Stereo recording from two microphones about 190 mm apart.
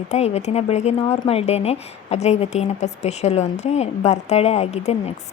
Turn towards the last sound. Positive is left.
turn(degrees=35)  # may be behind; listen again after turning